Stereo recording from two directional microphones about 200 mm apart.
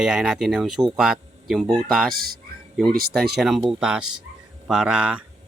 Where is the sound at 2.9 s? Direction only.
50° right (ahead or behind).